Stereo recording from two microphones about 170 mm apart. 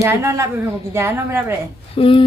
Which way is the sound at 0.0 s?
15° right (ahead or behind).